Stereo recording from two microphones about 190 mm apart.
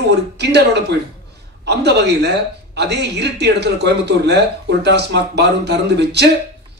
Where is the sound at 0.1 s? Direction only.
65° right (ahead or behind).